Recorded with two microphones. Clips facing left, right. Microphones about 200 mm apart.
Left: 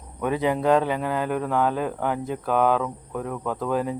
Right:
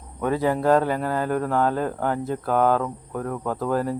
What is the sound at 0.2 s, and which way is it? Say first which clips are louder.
Speech: right 1 dB; 15° left (ahead or behind).